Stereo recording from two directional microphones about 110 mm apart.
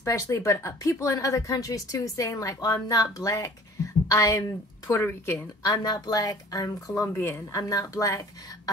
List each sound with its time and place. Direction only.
0.0 s speech: 25° left (ahead or behind)
5.6 s speech: 35° left (ahead or behind)